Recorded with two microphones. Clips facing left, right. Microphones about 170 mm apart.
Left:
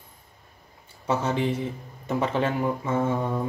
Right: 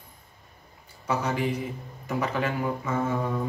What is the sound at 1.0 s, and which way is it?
A man's voice, 25° left (ahead or behind).